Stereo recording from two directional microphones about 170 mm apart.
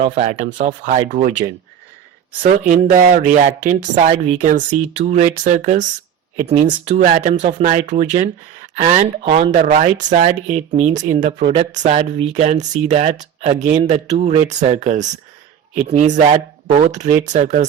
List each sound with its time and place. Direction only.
0.0 s speech: 40° right (ahead or behind)